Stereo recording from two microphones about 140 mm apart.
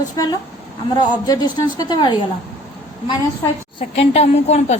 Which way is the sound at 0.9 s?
30° left (ahead or behind).